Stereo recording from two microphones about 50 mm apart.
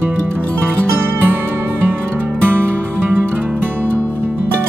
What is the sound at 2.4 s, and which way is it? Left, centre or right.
Music, right.